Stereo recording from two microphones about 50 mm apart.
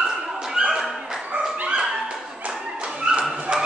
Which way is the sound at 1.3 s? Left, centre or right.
Right.